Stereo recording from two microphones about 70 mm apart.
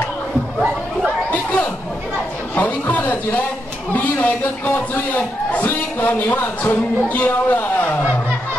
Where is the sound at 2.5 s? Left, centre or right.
Left.